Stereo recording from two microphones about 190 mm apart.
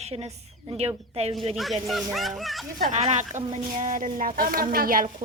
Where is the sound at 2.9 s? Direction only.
35° right (ahead or behind).